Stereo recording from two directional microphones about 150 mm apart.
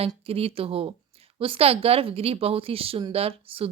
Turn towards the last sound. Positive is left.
turn(degrees=-40)  # may be behind; listen again after turning